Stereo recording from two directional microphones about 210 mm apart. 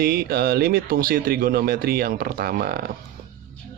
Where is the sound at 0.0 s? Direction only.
45° right (ahead or behind).